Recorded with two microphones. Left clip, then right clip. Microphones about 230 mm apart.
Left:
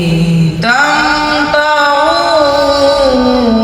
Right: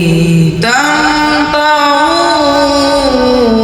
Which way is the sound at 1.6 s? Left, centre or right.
Right.